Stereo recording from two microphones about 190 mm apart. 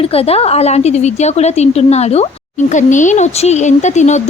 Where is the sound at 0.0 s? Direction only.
30° left (ahead or behind).